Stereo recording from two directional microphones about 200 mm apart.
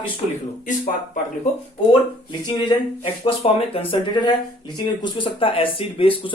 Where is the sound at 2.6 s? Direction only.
25° left (ahead or behind).